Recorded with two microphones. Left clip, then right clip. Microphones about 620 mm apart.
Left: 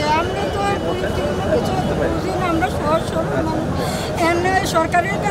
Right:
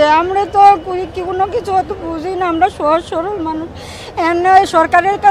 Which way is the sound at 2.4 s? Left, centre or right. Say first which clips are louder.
Right 9 dB; right.